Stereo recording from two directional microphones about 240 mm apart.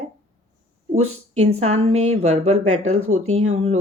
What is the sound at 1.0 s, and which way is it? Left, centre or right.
Speech, right.